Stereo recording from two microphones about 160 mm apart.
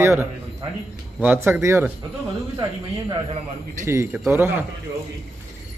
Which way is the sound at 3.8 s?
15° right (ahead or behind).